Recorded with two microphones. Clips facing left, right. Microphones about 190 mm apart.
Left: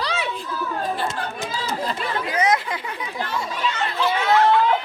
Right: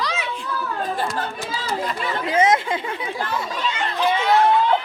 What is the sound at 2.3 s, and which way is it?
Chatter, 25° right (ahead or behind).